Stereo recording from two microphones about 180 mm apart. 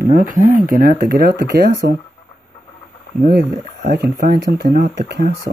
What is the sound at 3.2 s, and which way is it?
Speech, 65° right (ahead or behind).